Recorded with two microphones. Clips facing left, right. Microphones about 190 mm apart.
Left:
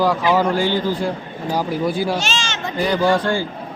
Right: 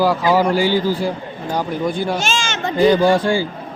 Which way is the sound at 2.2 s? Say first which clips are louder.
Right 3 dB; 50° right (ahead or behind).